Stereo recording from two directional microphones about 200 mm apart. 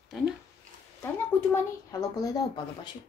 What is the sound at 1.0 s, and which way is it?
A child's voice, 10° left (ahead or behind).